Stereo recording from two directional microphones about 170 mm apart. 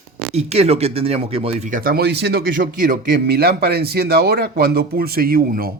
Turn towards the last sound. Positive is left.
turn(degrees=-60)  # may be behind; listen again after turning